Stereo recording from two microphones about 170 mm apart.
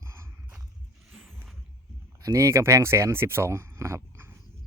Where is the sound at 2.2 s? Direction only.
15° right (ahead or behind).